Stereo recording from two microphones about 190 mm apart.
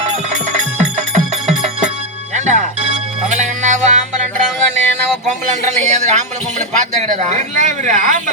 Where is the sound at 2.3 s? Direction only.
40° right (ahead or behind).